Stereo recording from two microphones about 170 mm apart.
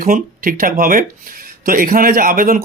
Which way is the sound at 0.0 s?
55° right (ahead or behind).